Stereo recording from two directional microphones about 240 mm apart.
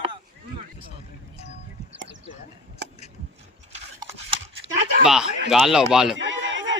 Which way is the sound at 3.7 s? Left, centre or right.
Right.